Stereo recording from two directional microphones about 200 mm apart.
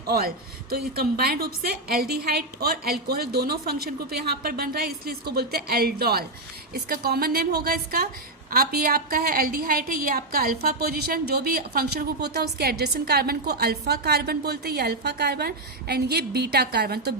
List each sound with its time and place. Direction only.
0.1 s a woman's voice: 50° right (ahead or behind)